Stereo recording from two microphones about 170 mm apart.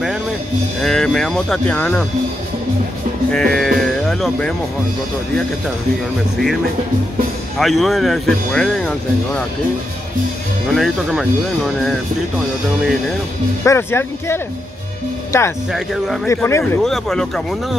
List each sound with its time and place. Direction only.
0.7 s speech: 5° left (ahead or behind)
3.3 s speech: 5° left (ahead or behind)
6.3 s speech: centre (ahead or behind)
10.7 s speech: centre (ahead or behind)
13.7 s speech: 15° left (ahead or behind)
15.7 s speech: centre (ahead or behind)
16.3 s speech: 15° left (ahead or behind)
16.8 s speech: centre (ahead or behind)